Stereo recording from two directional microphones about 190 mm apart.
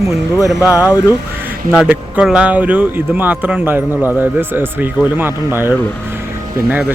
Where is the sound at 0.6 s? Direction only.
15° left (ahead or behind).